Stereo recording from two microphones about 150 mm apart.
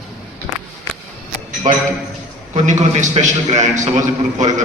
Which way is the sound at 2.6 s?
55° right (ahead or behind).